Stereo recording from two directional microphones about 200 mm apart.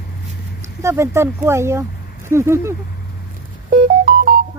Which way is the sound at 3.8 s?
50° right (ahead or behind).